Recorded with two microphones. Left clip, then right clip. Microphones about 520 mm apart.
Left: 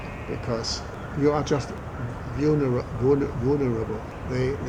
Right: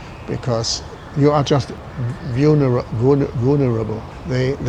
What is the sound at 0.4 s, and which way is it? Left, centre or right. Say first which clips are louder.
Speech: right 8 dB; right.